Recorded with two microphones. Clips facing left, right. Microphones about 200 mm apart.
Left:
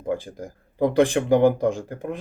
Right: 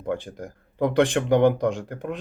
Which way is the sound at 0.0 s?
5° left (ahead or behind).